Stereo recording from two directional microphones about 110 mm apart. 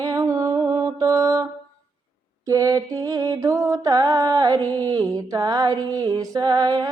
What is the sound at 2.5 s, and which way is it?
Mantra, 35° right (ahead or behind).